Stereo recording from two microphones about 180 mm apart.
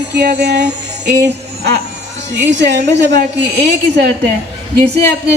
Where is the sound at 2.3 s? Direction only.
80° right.